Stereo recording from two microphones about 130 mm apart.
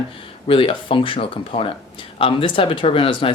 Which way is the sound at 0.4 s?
45° left (ahead or behind).